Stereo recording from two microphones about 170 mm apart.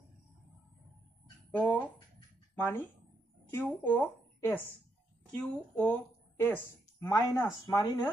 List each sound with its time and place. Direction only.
1.6 s a woman's voice: 10° left (ahead or behind)